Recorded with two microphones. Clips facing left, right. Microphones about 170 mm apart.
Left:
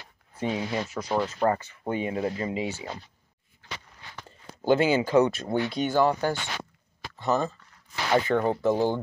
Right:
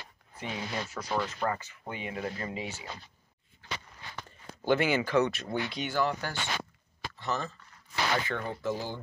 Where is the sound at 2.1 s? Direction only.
25° left (ahead or behind).